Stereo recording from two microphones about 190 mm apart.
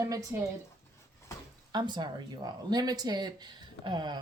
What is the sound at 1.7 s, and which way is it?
Speech, 25° right (ahead or behind).